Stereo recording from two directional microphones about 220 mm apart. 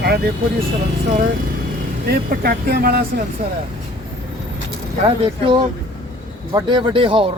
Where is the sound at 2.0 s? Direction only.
45° right (ahead or behind).